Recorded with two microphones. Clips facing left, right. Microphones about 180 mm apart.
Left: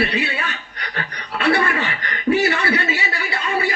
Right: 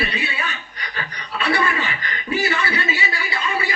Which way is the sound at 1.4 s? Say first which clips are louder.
Left 3 dB; 65° left (ahead or behind).